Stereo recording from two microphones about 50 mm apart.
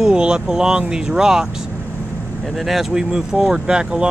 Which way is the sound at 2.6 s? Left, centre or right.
Centre.